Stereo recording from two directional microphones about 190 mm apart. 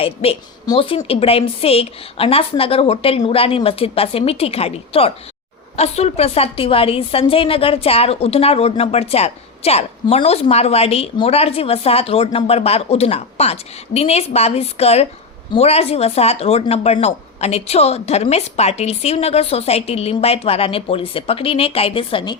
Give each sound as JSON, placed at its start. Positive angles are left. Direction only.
{"t": 0.0, "sound": "a woman's voice", "side_deg": 30}